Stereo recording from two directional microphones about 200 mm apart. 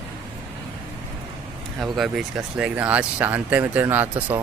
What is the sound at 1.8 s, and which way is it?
Speech, centre (ahead or behind).